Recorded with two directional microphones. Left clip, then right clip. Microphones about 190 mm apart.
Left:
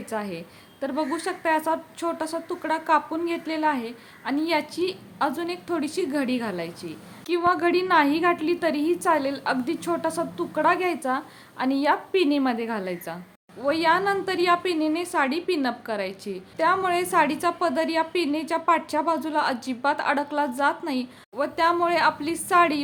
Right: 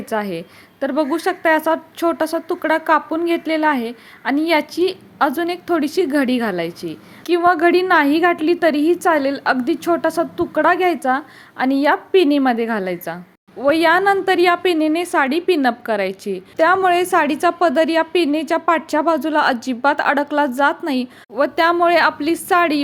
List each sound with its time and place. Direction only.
0.0 s a woman's voice: 30° right (ahead or behind)